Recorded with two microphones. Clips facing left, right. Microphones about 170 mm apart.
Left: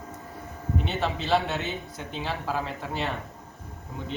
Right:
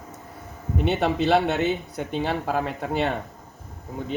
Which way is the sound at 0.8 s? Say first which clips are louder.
Right 7 dB; 60° right (ahead or behind).